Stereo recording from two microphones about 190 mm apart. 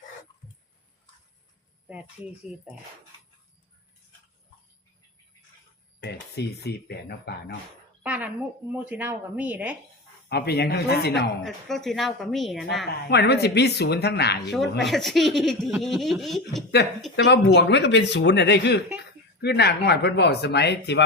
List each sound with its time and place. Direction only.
6.0 s speech: 60° left (ahead or behind)
8.0 s a sound: 5° right (ahead or behind)
8.9 s speech: 10° right (ahead or behind)
10.2 s speech: 60° left (ahead or behind)
11.4 s speech: centre (ahead or behind)
12.9 s speech: 60° left (ahead or behind)
14.5 s speech: centre (ahead or behind)
17.2 s speech: 65° left (ahead or behind)